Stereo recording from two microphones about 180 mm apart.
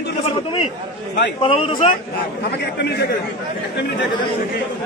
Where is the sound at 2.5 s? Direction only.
65° left (ahead or behind).